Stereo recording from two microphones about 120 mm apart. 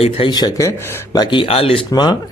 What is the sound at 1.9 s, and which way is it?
Speech, 35° left (ahead or behind).